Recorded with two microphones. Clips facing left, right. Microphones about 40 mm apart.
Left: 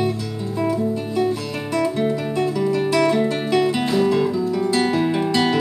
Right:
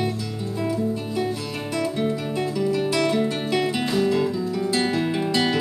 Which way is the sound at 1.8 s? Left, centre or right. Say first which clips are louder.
Left 4 dB; centre.